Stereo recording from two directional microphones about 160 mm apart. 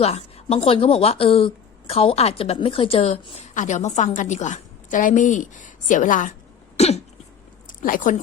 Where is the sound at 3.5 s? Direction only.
50° left (ahead or behind).